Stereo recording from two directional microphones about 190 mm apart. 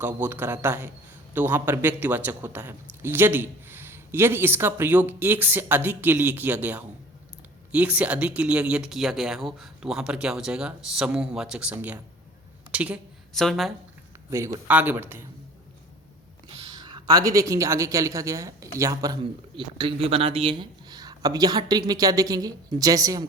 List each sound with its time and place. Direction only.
0.0 s a woman's voice: 10° right (ahead or behind)
14.3 s speech: 15° right (ahead or behind)
16.5 s speech: 25° right (ahead or behind)